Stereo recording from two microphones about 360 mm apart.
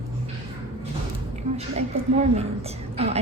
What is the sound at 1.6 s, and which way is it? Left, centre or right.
A woman's voice, centre.